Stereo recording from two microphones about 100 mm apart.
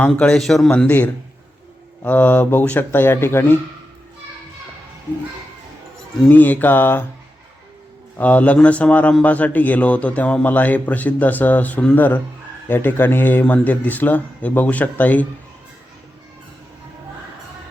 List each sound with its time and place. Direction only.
0.2 s speech: 5° left (ahead or behind)
0.7 s a man's voice: 15° left (ahead or behind)
6.2 s speech: 15° left (ahead or behind)
8.2 s a man's voice: 15° left (ahead or behind)